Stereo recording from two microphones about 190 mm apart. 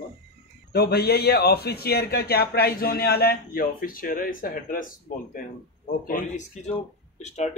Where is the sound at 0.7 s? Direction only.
55° left (ahead or behind).